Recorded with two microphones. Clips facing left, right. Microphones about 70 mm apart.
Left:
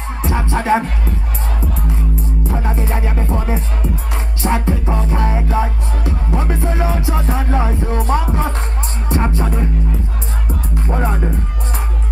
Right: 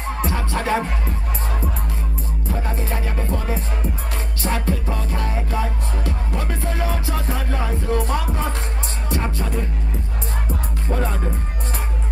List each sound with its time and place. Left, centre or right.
0.3 s music: left
2.5 s music: left
10.9 s music: left